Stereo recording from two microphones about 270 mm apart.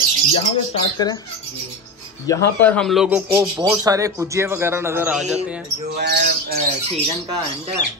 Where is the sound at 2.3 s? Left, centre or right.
Centre.